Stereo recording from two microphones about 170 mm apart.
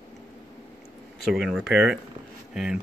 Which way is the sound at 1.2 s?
Centre (ahead or behind).